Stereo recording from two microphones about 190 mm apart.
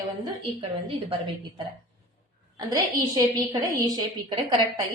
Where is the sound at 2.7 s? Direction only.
20° right (ahead or behind).